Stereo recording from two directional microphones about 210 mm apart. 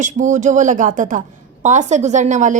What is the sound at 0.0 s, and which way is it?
A woman's voice, 35° right (ahead or behind).